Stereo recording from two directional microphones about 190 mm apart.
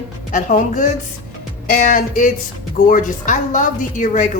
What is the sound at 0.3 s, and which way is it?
A woman's voice, 40° left (ahead or behind).